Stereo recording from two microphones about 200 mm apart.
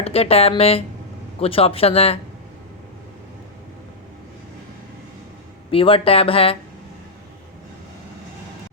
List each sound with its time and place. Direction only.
0.0 s speech: 30° left (ahead or behind)
5.7 s speech: 25° left (ahead or behind)